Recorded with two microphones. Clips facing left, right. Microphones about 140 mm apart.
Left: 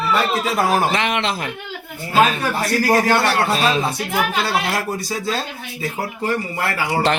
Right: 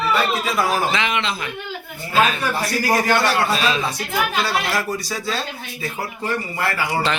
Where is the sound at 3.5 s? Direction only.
45° left (ahead or behind).